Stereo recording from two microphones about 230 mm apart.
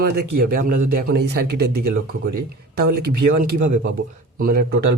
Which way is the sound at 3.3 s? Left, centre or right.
Right.